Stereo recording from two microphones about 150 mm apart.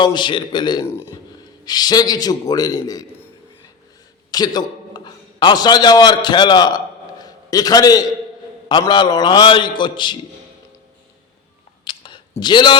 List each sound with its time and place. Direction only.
0.0 s a man's voice: 30° left (ahead or behind)
4.3 s a man's voice: 25° left (ahead or behind)
11.9 s a sound: 30° left (ahead or behind)
12.4 s a man's voice: 30° left (ahead or behind)